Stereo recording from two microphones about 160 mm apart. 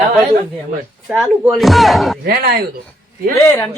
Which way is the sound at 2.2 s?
75° right (ahead or behind).